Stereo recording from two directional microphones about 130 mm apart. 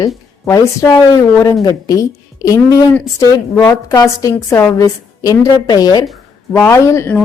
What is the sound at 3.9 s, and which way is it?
A woman's voice, 25° left (ahead or behind).